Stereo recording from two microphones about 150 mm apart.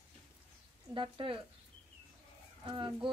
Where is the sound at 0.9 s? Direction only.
35° right (ahead or behind).